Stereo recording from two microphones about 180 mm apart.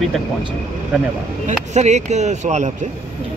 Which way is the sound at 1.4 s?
40° right (ahead or behind).